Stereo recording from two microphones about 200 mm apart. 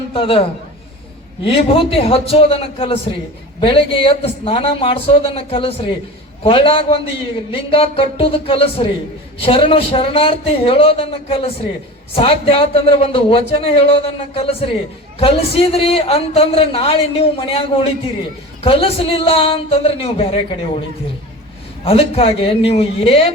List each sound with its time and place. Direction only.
0.1 s a man's voice: 25° left (ahead or behind)
1.5 s a man's voice: 30° left (ahead or behind)
21.8 s a man's voice: 30° left (ahead or behind)